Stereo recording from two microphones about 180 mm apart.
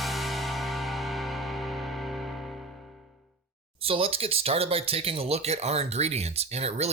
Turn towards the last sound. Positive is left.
turn(degrees=-35)  # may be behind; listen again after turning